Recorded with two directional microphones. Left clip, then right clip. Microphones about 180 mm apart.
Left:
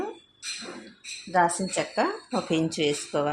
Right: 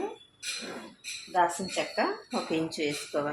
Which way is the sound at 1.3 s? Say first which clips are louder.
Left 4 dB; 50° left (ahead or behind).